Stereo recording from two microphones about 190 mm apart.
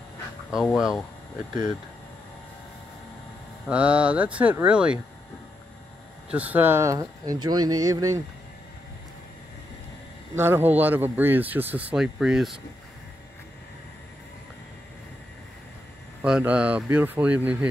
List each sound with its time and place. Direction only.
0.7 s speech: centre (ahead or behind)
3.6 s speech: 5° right (ahead or behind)
6.3 s speech: 10° right (ahead or behind)
10.3 s speech: 10° right (ahead or behind)
16.2 s speech: 5° right (ahead or behind)